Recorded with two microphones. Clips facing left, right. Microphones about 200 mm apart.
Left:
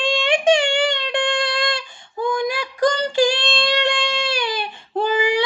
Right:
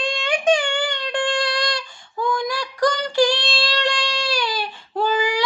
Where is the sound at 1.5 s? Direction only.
50° left (ahead or behind).